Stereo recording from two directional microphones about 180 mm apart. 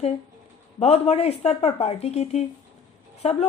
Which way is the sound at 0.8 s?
35° left (ahead or behind).